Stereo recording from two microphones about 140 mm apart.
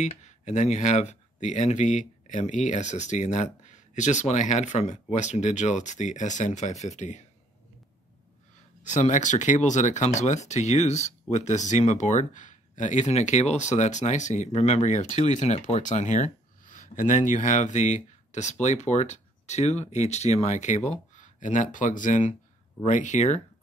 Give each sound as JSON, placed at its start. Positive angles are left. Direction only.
{"t": 0.0, "sound": "speech", "side_deg": 55}
{"t": 8.8, "sound": "speech", "side_deg": 60}